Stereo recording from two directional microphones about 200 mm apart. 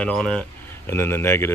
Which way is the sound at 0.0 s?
5° left (ahead or behind).